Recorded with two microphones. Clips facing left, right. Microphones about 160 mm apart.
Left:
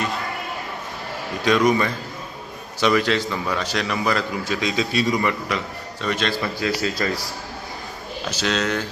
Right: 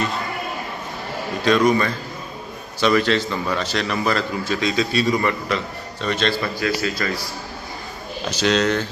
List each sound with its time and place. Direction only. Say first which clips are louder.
1.5 s a man's voice: right 1 dB; 15° left (ahead or behind)
6.4 s a man's voice: right 1 dB; 25° left (ahead or behind)
8.3 s speech: right 4 dB; 5° left (ahead or behind)